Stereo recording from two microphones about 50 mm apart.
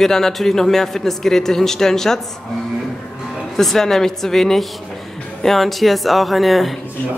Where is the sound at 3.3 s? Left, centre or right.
Centre.